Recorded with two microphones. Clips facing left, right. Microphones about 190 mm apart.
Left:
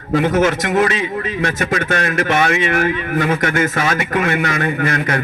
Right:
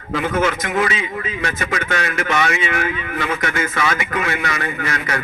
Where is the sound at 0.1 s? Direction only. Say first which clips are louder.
Left 5 dB; 45° left (ahead or behind).